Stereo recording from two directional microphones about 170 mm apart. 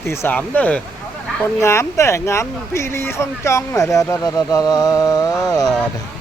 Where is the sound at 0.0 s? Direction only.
15° left (ahead or behind).